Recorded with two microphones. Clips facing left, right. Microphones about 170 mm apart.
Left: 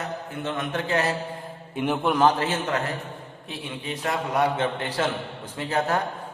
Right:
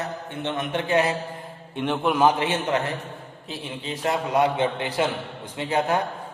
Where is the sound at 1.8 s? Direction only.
Centre (ahead or behind).